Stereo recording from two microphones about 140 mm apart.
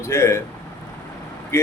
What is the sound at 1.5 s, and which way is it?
Speech, 20° left (ahead or behind).